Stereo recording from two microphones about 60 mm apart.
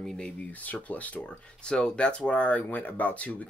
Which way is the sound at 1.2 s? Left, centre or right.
Centre.